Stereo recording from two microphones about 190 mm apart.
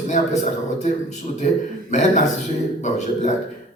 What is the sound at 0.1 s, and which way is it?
A man's voice, 40° left (ahead or behind).